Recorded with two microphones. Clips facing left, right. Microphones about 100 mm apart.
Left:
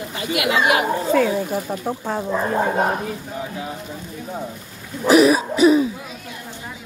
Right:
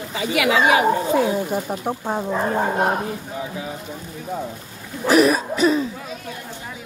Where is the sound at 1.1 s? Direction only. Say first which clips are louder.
Left 1 dB; 20° right (ahead or behind).